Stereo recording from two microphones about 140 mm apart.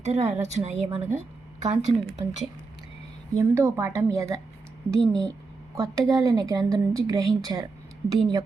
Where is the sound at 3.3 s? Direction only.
20° right (ahead or behind).